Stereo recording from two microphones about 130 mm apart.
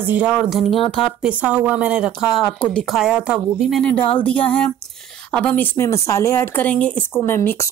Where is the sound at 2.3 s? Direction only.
5° left (ahead or behind).